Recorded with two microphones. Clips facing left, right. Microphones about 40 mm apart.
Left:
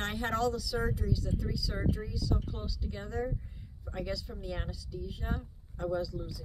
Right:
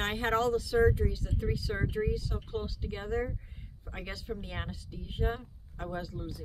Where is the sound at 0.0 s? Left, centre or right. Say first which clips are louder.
Right 2 dB; right.